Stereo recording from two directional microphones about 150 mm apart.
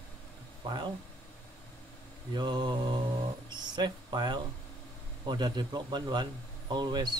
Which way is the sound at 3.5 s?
30° right (ahead or behind).